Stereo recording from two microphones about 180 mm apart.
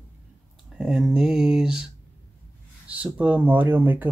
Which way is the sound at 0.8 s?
5° right (ahead or behind).